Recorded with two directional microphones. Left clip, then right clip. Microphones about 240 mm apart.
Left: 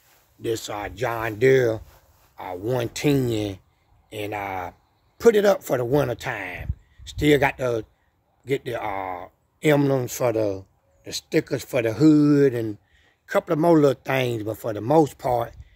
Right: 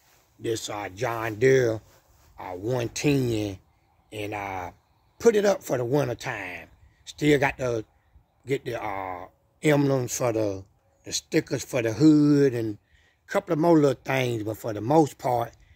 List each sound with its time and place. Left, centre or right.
0.4 s speech: centre